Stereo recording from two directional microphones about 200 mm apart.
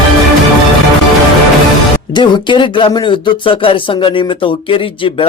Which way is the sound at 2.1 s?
20° left (ahead or behind).